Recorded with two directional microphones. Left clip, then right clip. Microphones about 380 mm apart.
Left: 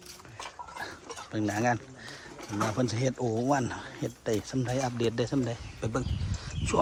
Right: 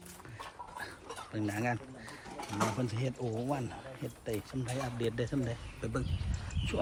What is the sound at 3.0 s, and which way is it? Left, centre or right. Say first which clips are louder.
Speech: left 8 dB; left.